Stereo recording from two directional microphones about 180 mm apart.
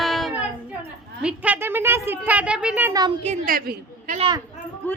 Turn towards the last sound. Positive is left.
turn(degrees=10)  # may be behind; listen again after turning